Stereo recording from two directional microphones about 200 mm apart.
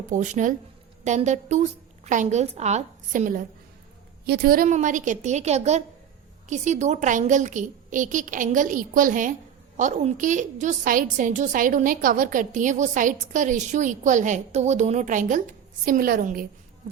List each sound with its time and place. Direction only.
0.1 s a woman's voice: 40° right (ahead or behind)